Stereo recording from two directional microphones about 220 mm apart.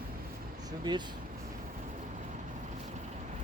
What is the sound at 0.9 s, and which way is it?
Speech, 20° right (ahead or behind).